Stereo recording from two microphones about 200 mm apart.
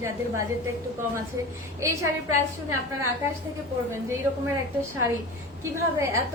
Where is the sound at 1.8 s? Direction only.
15° right (ahead or behind).